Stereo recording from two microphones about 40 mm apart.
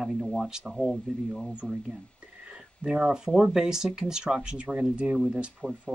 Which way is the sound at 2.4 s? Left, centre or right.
Centre.